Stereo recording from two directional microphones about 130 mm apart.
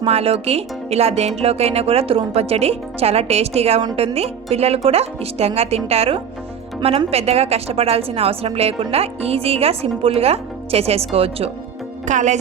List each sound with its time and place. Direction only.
0.0 s speech: 50° right (ahead or behind)
12.0 s speech: 65° right (ahead or behind)